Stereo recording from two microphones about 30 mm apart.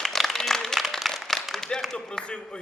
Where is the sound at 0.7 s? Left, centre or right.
Centre.